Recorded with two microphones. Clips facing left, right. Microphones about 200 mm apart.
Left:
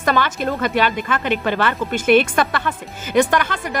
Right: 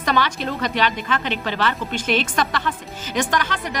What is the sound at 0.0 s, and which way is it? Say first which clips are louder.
A woman's voice: left 3 dB; 50° left (ahead or behind).